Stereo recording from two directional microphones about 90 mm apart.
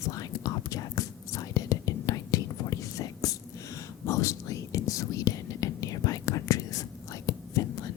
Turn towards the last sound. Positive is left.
turn(degrees=40)  # may be behind; listen again after turning